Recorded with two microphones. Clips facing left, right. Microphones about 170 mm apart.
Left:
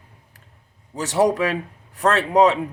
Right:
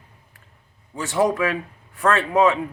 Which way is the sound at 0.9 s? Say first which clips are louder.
Left 2 dB; 40° left (ahead or behind).